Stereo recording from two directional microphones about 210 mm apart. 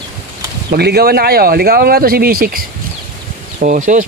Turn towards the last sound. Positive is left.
turn(degrees=-40)  # may be behind; listen again after turning